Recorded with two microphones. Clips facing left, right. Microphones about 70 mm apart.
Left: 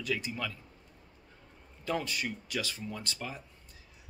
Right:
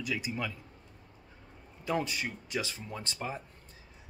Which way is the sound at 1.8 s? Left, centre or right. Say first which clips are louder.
Right 1 dB; right.